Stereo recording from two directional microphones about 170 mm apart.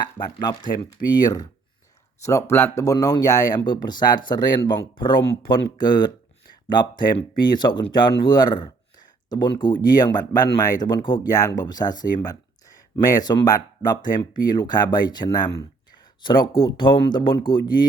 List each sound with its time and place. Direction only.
0.0 s speech: 25° left (ahead or behind)